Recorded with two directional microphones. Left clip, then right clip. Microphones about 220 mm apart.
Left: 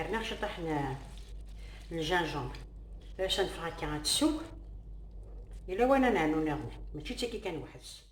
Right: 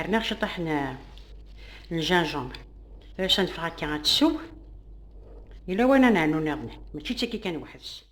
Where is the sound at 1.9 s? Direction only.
50° right (ahead or behind).